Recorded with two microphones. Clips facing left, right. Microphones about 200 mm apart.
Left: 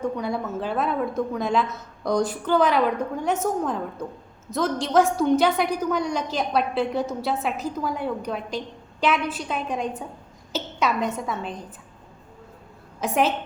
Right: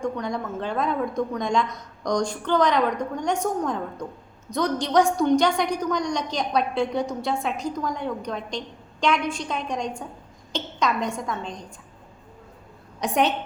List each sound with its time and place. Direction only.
0.0 s a woman's voice: 5° left (ahead or behind)
13.0 s speech: centre (ahead or behind)